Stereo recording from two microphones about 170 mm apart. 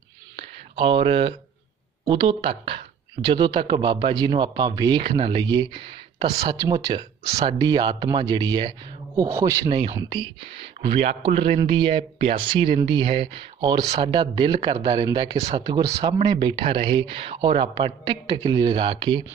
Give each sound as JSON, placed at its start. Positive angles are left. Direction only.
{"t": 0.3, "sound": "a sound", "side_deg": -30}
{"t": 2.0, "sound": "speech", "side_deg": -30}
{"t": 6.7, "sound": "speech", "side_deg": -25}
{"t": 15.4, "sound": "speech", "side_deg": -40}
{"t": 15.6, "sound": "speech", "side_deg": -20}